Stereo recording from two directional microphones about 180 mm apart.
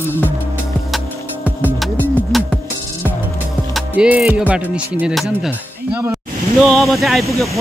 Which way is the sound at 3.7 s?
5° right (ahead or behind).